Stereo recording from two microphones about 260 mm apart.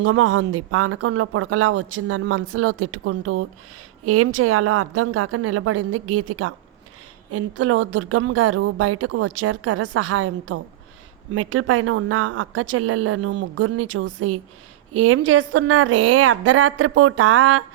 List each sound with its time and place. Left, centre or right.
0.0 s speech: right